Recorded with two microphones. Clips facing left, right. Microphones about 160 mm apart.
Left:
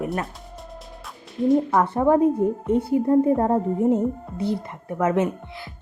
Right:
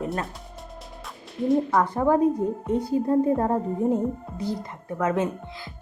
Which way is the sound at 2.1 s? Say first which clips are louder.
Left 3 dB; 20° left (ahead or behind).